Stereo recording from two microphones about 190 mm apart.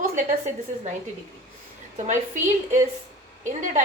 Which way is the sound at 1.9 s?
40° right (ahead or behind).